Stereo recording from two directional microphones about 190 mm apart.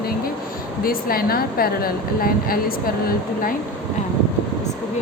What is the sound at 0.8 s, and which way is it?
Speech, 50° left (ahead or behind).